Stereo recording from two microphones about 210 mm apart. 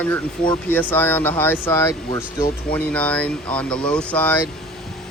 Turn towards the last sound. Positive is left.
turn(degrees=5)  # may be behind; listen again after turning